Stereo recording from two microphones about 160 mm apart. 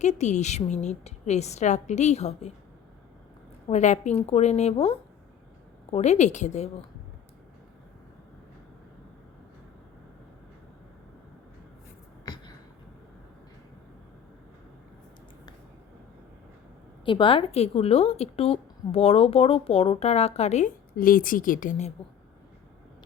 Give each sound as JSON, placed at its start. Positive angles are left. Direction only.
{"t": 0.0, "sound": "a woman's voice", "side_deg": 45}
{"t": 3.7, "sound": "a woman's voice", "side_deg": 45}
{"t": 12.2, "sound": "a sound", "side_deg": 25}
{"t": 17.1, "sound": "a woman's voice", "side_deg": 30}